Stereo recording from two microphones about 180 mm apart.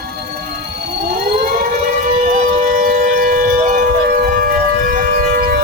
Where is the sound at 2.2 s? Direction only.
45° right (ahead or behind).